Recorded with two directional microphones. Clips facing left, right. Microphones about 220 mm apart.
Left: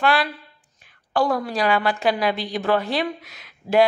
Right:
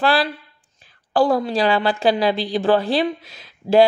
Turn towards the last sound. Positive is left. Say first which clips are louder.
# right 4 dB
turn(degrees=-30)  # may be behind; listen again after turning